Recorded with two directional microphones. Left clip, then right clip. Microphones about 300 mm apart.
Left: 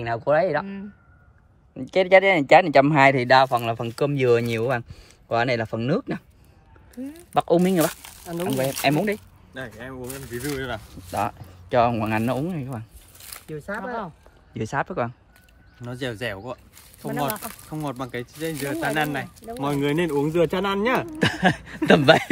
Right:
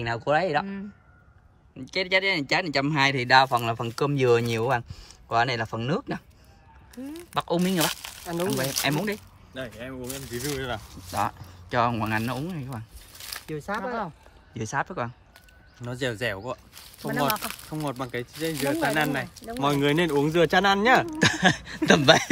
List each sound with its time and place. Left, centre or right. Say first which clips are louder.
0.0 s speech: left 3 dB; centre
1.8 s speech: left 8 dB; centre
7.3 s speech: left 6 dB; centre
9.5 s speech: left 1 dB; centre
13.3 s a sound: right 1 dB; centre
13.8 s speech: even; right
14.5 s speech: left 3 dB; centre
17.6 s speech: left 4 dB; centre